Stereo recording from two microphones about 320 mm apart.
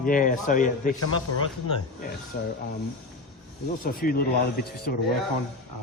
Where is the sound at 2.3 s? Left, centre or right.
Left.